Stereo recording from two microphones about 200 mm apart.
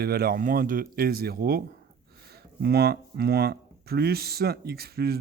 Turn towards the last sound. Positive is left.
turn(degrees=-50)  # may be behind; listen again after turning